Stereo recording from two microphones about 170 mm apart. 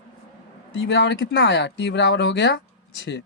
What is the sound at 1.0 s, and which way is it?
Speech, 90° left.